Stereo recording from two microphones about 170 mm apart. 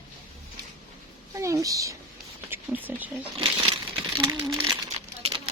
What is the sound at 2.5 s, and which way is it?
Speech, 10° right (ahead or behind).